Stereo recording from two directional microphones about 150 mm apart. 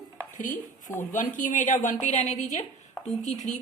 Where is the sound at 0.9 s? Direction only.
60° left (ahead or behind).